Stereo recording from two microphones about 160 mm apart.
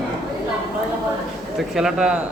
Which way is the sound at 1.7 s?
5° right (ahead or behind).